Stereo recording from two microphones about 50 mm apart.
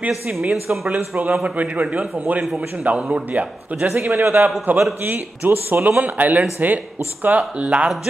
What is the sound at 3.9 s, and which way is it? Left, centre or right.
A man's voice, right.